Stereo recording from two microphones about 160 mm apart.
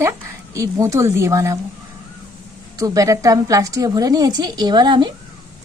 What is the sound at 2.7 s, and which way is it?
A woman's voice, 20° right (ahead or behind).